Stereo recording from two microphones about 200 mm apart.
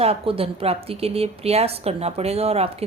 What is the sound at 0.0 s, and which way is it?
A woman's voice, 30° right (ahead or behind).